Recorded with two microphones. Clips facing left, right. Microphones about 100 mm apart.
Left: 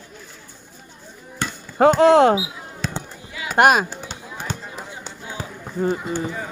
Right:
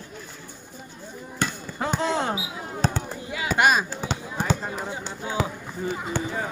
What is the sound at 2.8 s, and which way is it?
Fireworks, 35° right (ahead or behind).